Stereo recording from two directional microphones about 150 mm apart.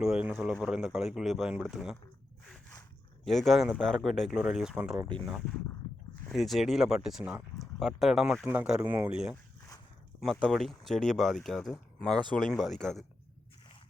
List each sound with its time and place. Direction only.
0.0 s speech: 5° right (ahead or behind)
3.2 s speech: centre (ahead or behind)
9.3 s a sound: 20° left (ahead or behind)
10.2 s speech: centre (ahead or behind)